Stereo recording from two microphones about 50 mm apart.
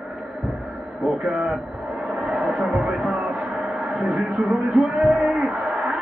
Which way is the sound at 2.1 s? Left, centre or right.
Centre.